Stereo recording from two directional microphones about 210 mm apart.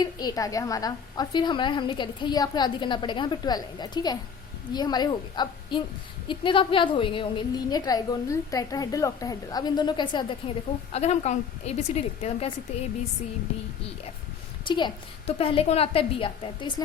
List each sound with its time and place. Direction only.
0.0 s a woman's voice: 20° left (ahead or behind)
14.6 s a woman's voice: 20° left (ahead or behind)